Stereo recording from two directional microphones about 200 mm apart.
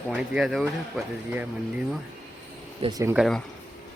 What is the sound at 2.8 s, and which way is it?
Speech, 20° right (ahead or behind).